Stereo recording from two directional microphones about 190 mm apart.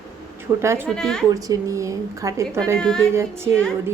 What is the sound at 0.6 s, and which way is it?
Speech, 15° right (ahead or behind).